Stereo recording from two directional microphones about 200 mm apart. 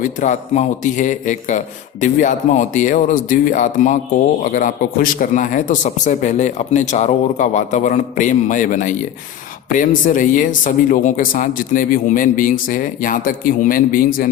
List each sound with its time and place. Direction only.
0.0 s speech: 40° left (ahead or behind)